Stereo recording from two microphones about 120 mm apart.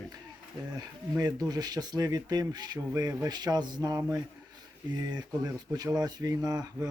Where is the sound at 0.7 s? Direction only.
35° right (ahead or behind).